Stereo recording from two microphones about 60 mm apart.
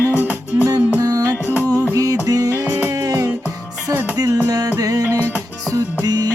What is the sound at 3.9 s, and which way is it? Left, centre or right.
Music, right.